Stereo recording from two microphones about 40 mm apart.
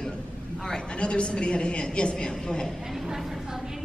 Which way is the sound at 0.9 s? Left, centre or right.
Left.